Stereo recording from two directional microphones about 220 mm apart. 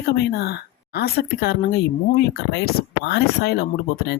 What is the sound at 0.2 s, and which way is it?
Speech, 50° left (ahead or behind).